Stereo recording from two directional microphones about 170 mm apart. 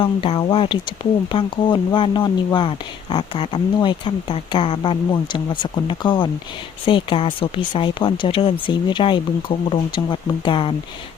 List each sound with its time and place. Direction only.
0.0 s speech: 30° left (ahead or behind)